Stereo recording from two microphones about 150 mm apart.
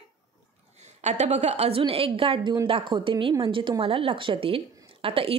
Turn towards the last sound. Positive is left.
turn(degrees=-40)  # may be behind; listen again after turning